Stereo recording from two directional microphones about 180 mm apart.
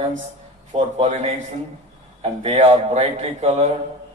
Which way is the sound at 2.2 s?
35° right (ahead or behind).